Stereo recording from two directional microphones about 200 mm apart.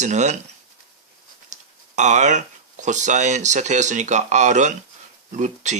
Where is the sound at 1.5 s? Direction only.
35° right (ahead or behind).